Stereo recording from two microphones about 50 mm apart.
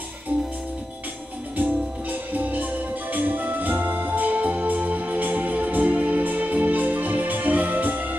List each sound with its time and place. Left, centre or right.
1.6 s music: right